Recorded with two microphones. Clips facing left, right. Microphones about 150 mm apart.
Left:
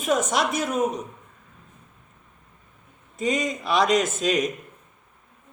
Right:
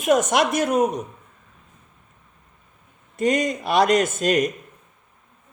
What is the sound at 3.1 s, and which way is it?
Speech, 70° right (ahead or behind).